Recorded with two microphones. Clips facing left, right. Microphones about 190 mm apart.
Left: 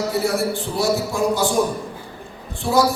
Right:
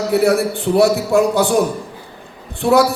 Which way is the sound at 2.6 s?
65° right (ahead or behind).